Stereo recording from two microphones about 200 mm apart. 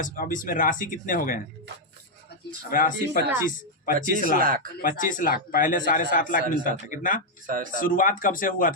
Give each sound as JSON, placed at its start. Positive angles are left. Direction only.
{"t": 0.0, "sound": "speech", "side_deg": 40}
{"t": 2.6, "sound": "a man's voice", "side_deg": 45}
{"t": 4.4, "sound": "speech", "side_deg": -45}
{"t": 4.8, "sound": "a man's voice", "side_deg": 40}
{"t": 7.4, "sound": "speech", "side_deg": -40}
{"t": 7.8, "sound": "a man's voice", "side_deg": 40}